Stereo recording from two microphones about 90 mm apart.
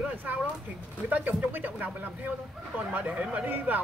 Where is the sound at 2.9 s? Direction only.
20° right (ahead or behind).